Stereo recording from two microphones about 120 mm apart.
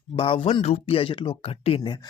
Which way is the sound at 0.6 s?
60° left (ahead or behind).